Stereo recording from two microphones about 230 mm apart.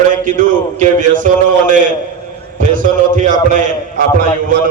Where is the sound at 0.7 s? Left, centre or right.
Right.